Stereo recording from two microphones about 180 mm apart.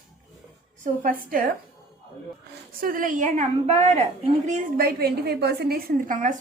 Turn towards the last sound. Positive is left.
turn(degrees=-45)  # may be behind; listen again after turning